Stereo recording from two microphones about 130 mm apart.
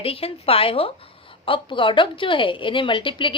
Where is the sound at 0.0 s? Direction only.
50° left (ahead or behind).